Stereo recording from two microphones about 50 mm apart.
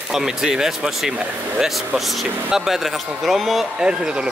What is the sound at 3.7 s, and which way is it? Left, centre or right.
Speech, centre.